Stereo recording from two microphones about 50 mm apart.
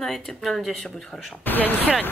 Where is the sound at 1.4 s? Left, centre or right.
Left.